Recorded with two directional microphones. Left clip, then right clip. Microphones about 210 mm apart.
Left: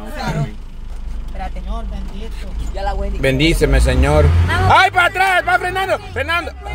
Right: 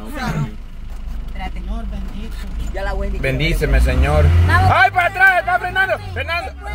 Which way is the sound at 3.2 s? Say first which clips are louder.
Left 6 dB; 25° left (ahead or behind).